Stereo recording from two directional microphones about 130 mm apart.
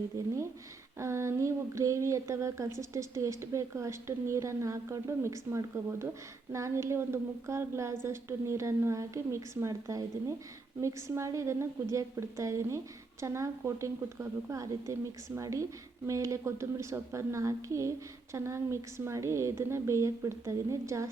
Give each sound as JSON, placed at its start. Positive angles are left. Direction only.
{"t": 0.1, "sound": "speech", "side_deg": -25}